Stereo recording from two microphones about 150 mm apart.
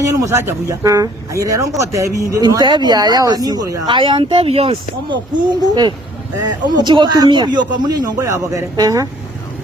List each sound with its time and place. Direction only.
0.0 s speech: 20° right (ahead or behind)
6.4 s speech: 30° right (ahead or behind)